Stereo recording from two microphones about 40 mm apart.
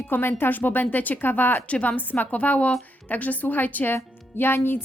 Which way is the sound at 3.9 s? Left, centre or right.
Left.